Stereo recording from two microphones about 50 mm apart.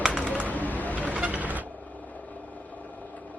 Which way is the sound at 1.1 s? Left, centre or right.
Right.